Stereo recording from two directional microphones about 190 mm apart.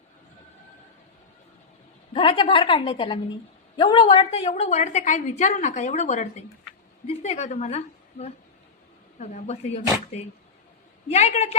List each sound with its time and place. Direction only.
2.1 s a woman's voice: 25° left (ahead or behind)